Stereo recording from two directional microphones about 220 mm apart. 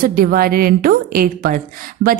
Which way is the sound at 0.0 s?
40° right (ahead or behind).